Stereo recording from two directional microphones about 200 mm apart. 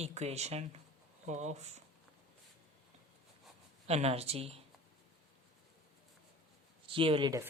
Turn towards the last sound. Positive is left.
turn(degrees=-20)  # may be behind; listen again after turning